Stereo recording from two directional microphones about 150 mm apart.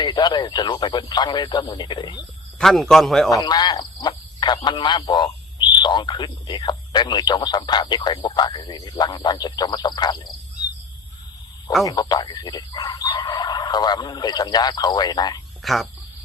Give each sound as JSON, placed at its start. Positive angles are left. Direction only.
{"t": 0.0, "sound": "speech", "side_deg": 30}
{"t": 2.6, "sound": "speech", "side_deg": 0}
{"t": 3.2, "sound": "speech", "side_deg": 25}
{"t": 11.9, "sound": "speech", "side_deg": 25}
{"t": 15.6, "sound": "speech", "side_deg": 0}